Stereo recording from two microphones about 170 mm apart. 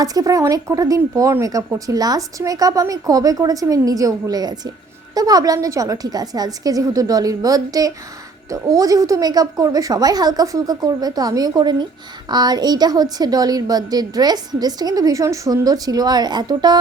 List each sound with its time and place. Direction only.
0.0 s speech: 20° right (ahead or behind)